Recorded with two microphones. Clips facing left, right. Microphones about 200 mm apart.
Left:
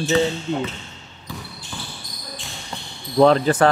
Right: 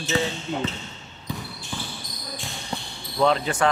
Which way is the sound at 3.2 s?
40° left (ahead or behind).